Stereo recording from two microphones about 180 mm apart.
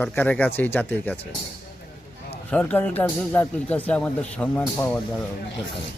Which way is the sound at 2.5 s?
10° left (ahead or behind).